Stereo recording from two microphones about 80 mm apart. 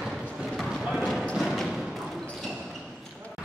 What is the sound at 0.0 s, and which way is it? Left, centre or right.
Clip-clop, centre.